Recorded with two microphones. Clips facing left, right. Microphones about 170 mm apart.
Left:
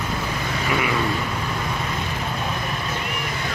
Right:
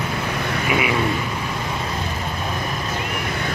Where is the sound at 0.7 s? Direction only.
20° right (ahead or behind).